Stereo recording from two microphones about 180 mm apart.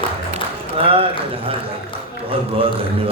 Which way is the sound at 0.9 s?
30° right (ahead or behind).